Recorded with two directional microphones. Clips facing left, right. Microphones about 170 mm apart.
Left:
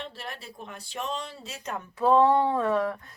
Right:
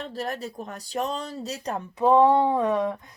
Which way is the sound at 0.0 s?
40° right (ahead or behind).